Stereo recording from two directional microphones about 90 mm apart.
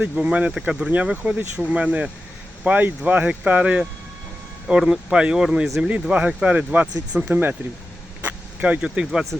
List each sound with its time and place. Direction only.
0.0 s speech: 15° right (ahead or behind)
4.7 s speech: 5° right (ahead or behind)